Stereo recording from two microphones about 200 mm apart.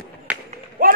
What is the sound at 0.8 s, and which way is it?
Run, 45° right (ahead or behind).